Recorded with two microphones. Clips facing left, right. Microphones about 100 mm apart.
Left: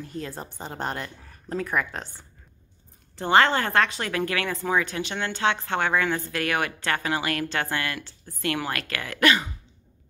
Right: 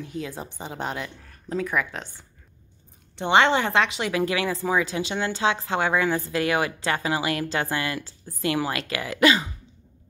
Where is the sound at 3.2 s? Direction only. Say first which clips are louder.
Right 1 dB; 15° right (ahead or behind).